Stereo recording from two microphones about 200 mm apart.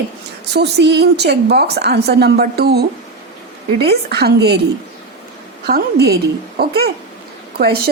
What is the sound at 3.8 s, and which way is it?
Speech, 55° right (ahead or behind).